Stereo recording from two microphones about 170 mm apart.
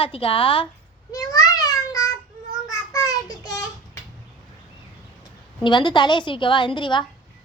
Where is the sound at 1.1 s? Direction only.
20° left (ahead or behind).